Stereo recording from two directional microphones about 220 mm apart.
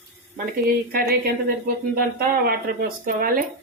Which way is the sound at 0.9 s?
45° right (ahead or behind).